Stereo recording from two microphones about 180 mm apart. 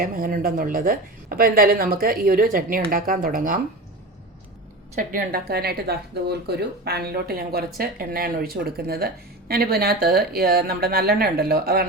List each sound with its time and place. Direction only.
0.0 s speech: 50° right (ahead or behind)
4.9 s speech: 55° right (ahead or behind)